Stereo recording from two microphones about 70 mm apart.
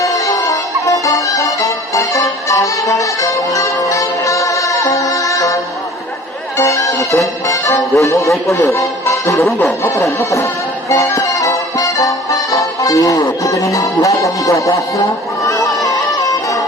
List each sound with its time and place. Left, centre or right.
0.0 s music: left
6.6 s music: left
7.9 s speech: left
8.6 s music: left